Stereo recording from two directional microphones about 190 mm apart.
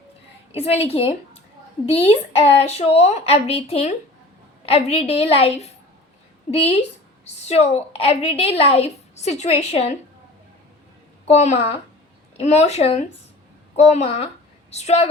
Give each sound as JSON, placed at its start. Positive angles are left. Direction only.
{"t": 0.5, "sound": "a woman's voice", "side_deg": 30}
{"t": 7.4, "sound": "a woman's voice", "side_deg": 35}
{"t": 11.3, "sound": "a woman's voice", "side_deg": 35}